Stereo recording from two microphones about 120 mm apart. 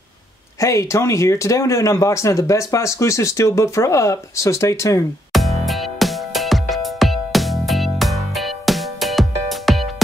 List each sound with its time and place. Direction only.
0.6 s speech: 25° left (ahead or behind)
5.3 s music: centre (ahead or behind)